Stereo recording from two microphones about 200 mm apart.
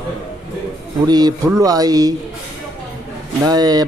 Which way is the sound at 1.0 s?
20° right (ahead or behind).